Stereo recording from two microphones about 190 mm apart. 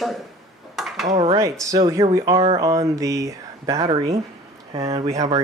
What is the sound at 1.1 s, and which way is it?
Speech, 30° right (ahead or behind).